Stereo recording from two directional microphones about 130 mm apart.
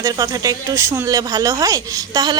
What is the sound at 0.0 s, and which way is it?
Speech, 25° right (ahead or behind).